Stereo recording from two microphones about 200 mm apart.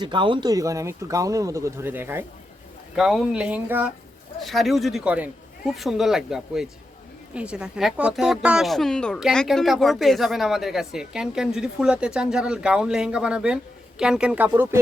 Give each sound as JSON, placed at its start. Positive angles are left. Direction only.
{"t": 0.0, "sound": "speech", "side_deg": -25}